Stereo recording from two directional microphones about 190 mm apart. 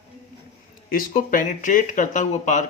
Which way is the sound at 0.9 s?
45° left (ahead or behind).